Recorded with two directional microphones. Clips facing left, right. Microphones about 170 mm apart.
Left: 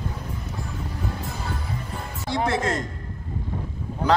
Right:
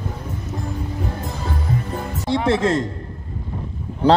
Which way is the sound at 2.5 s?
25° right (ahead or behind).